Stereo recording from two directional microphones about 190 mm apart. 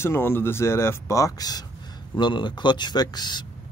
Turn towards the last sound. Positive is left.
turn(degrees=20)  # may be behind; listen again after turning